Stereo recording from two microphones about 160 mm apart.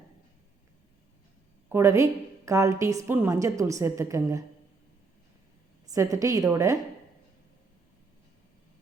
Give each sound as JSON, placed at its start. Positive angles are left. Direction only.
{"t": 1.7, "sound": "a woman's voice", "side_deg": -20}
{"t": 5.8, "sound": "a woman's voice", "side_deg": -20}